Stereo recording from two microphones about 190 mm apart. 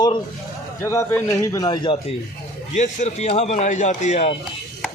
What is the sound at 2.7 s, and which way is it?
Speech, 40° left (ahead or behind).